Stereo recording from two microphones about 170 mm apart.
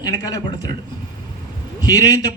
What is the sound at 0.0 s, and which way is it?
Speech, 20° left (ahead or behind).